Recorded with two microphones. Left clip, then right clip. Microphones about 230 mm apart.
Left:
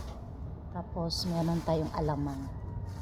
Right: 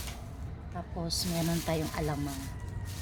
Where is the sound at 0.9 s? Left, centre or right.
Centre.